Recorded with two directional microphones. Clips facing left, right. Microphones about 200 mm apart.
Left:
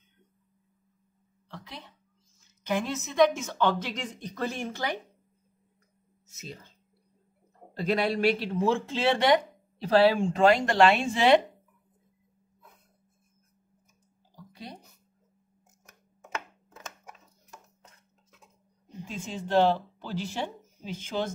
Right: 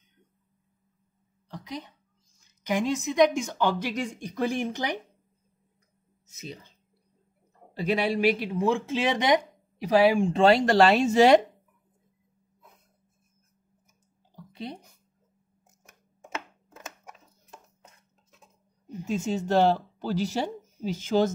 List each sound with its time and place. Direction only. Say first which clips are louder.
1.5 s a woman's voice: right 7 dB; 15° right (ahead or behind)
7.7 s speech: right 1 dB; 10° right (ahead or behind)
10.3 s speech: right 3 dB; 30° right (ahead or behind)
14.3 s a sound: right 6 dB; 25° right (ahead or behind)
19.0 s speech: right 8 dB; 45° right (ahead or behind)